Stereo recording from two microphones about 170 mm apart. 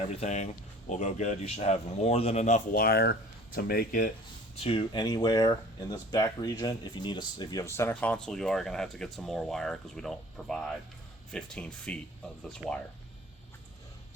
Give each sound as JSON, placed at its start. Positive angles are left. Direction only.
{"t": 0.1, "sound": "speech", "side_deg": 40}
{"t": 4.6, "sound": "speech", "side_deg": 30}
{"t": 12.6, "sound": "speech", "side_deg": -10}